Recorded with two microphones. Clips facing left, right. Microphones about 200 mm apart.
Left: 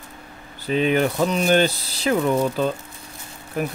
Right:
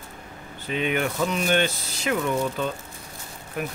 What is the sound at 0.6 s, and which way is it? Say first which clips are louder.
Speech: left 6 dB; 35° left (ahead or behind).